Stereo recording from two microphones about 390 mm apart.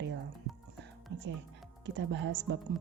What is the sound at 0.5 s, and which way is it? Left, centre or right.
Music, centre.